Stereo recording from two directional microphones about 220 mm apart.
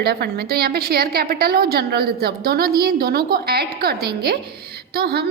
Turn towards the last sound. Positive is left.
turn(degrees=-45)  # may be behind; listen again after turning